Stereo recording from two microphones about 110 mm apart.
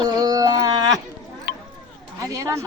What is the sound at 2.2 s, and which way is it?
Speech, 30° right (ahead or behind).